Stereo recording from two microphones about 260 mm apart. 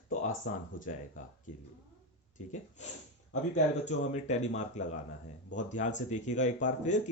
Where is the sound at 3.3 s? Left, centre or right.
Left.